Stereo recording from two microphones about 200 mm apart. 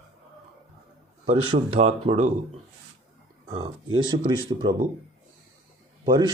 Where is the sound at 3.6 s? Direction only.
20° right (ahead or behind).